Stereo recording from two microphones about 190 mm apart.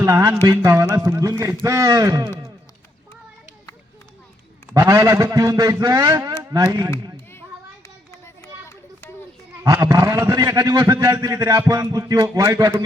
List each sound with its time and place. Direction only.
0.0 s a man's voice: 15° right (ahead or behind)
4.7 s a man's voice: 15° right (ahead or behind)
7.3 s children playing: 15° left (ahead or behind)
9.6 s a man's voice: 20° right (ahead or behind)